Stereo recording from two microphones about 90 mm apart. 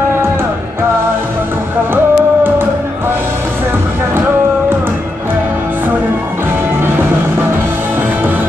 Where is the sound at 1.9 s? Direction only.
25° right (ahead or behind).